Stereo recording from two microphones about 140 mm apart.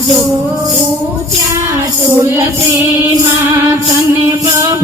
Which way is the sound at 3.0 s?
15° right (ahead or behind).